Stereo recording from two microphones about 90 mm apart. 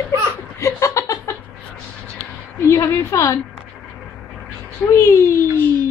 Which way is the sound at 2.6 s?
30° left (ahead or behind).